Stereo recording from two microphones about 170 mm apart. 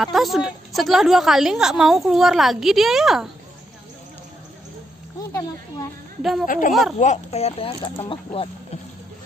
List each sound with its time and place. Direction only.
0.0 s a woman's voice: centre (ahead or behind)
5.3 s speech: 20° left (ahead or behind)
6.4 s speech: 50° left (ahead or behind)
7.0 s speech: 40° left (ahead or behind)